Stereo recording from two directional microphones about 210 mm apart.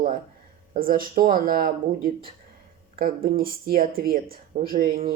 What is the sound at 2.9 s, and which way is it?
Speech, 45° right (ahead or behind).